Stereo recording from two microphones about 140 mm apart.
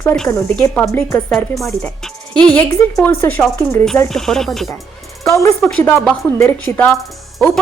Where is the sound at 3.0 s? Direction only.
10° left (ahead or behind).